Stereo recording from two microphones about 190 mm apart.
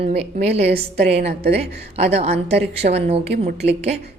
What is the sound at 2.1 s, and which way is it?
Speech, 35° right (ahead or behind).